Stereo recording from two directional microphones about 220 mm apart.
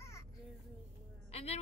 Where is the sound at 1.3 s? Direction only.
30° left (ahead or behind).